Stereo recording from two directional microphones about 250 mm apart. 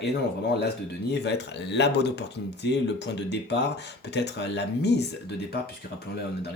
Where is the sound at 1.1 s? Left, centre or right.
Left.